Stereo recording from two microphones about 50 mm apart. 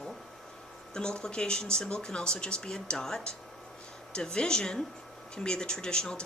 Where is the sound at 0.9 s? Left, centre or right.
Centre.